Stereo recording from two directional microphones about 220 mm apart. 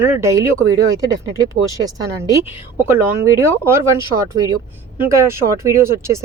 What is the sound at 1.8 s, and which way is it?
Speech, 10° right (ahead or behind).